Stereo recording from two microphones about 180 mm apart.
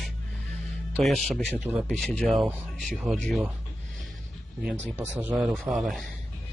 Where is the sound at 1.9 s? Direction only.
5° left (ahead or behind).